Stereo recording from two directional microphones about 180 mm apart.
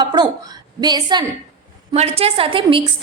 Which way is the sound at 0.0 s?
25° right (ahead or behind).